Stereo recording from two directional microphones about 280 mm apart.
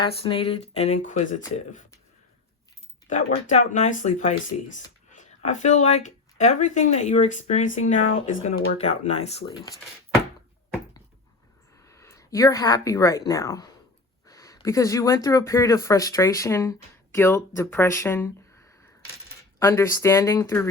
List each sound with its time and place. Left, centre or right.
0.2 s speech: centre
3.1 s speech: left
11.9 s speech: centre
19.5 s speech: centre